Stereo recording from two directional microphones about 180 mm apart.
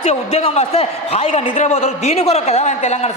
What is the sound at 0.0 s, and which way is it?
A man's voice, 35° left (ahead or behind).